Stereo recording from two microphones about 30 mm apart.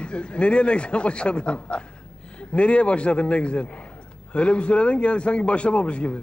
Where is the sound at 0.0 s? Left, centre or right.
Left.